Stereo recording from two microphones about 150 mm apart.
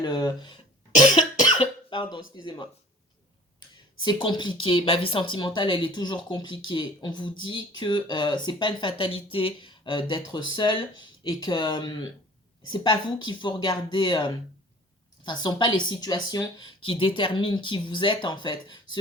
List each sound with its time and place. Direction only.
0.0 s speech: 30° left (ahead or behind)
1.5 s cough: 35° left (ahead or behind)
2.3 s speech: 30° left (ahead or behind)
4.0 s speech: 30° left (ahead or behind)